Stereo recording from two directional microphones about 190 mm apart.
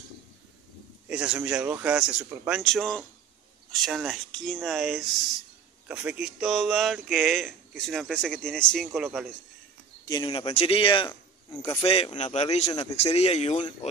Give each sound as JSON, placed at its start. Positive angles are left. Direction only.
{"t": 1.0, "sound": "a man's voice", "side_deg": -5}
{"t": 10.0, "sound": "speech", "side_deg": 20}